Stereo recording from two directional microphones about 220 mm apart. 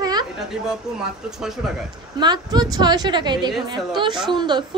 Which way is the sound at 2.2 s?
20° right (ahead or behind).